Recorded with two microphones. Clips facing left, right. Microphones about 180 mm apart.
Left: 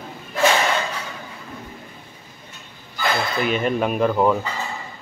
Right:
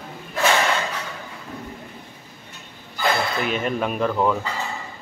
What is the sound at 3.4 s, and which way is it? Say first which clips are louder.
Speech: left 3 dB; centre (ahead or behind).